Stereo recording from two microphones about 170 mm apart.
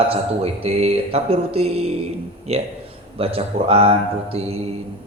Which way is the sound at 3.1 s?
35° right (ahead or behind).